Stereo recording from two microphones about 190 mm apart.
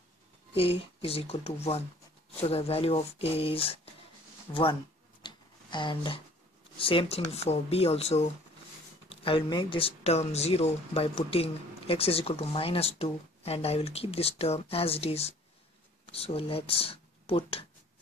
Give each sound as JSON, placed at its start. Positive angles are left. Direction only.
{"t": 0.6, "sound": "speech", "side_deg": 30}
{"t": 5.2, "sound": "a sound", "side_deg": 25}
{"t": 6.8, "sound": "speech", "side_deg": 30}